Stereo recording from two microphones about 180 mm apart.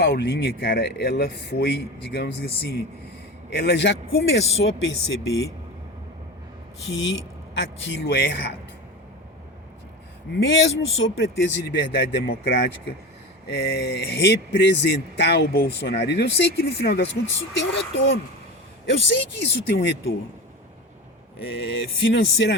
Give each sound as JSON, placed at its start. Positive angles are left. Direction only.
{"t": 0.0, "sound": "speech", "side_deg": 65}
{"t": 3.5, "sound": "speech", "side_deg": 75}
{"t": 6.8, "sound": "speech", "side_deg": 90}
{"t": 10.4, "sound": "speech", "side_deg": 90}
{"t": 22.0, "sound": "speech", "side_deg": 90}